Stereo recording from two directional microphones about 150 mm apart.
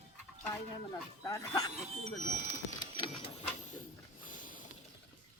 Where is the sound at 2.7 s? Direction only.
30° left (ahead or behind).